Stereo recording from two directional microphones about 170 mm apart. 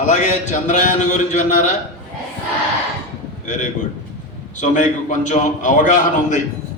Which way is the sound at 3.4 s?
45° left (ahead or behind).